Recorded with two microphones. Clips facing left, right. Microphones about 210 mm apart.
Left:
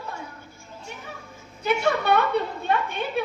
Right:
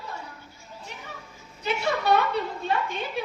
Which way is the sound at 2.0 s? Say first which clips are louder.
Right 1 dB; 60° left (ahead or behind).